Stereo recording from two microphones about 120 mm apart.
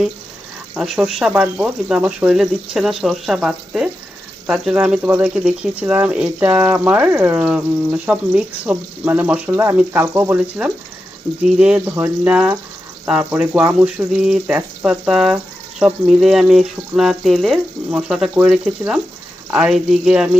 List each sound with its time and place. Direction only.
0.8 s speech: 5° right (ahead or behind)
11.9 s speech: 20° right (ahead or behind)